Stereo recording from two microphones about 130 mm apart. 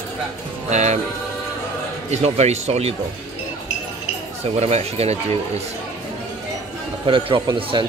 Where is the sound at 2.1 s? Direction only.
60° right (ahead or behind).